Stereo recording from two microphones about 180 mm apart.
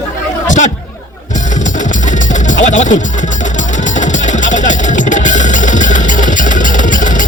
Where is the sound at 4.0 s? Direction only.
45° left (ahead or behind).